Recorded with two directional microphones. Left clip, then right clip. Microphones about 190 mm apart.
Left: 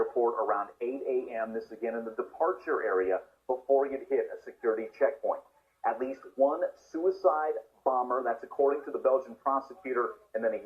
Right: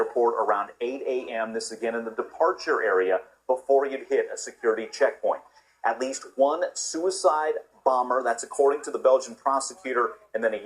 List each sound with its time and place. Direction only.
0.0 s speech: 35° right (ahead or behind)